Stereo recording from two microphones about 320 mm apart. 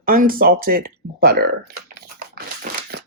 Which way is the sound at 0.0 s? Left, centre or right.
Right.